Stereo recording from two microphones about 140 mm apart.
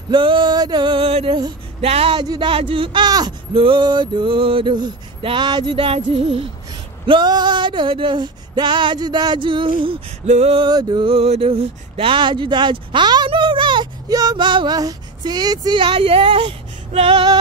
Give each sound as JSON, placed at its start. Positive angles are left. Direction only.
{"t": 0.1, "sound": "male singing", "side_deg": -35}
{"t": 10.2, "sound": "male singing", "side_deg": -60}
{"t": 10.5, "sound": "a sound", "side_deg": -35}